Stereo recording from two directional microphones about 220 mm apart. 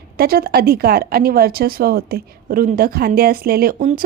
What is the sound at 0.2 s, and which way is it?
Speech, 45° right (ahead or behind).